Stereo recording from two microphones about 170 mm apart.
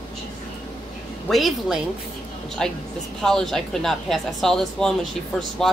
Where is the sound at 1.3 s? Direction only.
Centre (ahead or behind).